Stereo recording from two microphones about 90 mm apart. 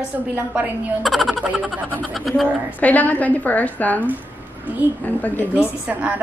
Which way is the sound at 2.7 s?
20° left (ahead or behind).